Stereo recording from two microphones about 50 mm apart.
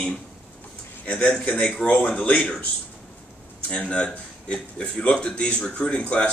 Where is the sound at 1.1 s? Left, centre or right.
Centre.